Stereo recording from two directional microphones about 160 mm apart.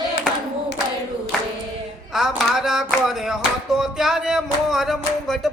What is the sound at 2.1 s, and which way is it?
Music, centre (ahead or behind).